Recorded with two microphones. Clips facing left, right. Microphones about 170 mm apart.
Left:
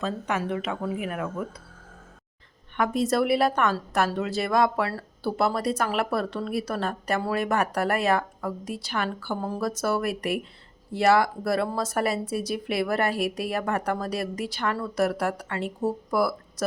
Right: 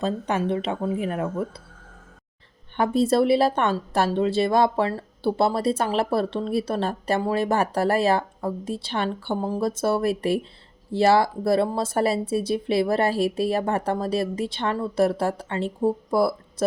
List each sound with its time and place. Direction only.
0.0 s speech: 30° right (ahead or behind)
2.7 s speech: 30° right (ahead or behind)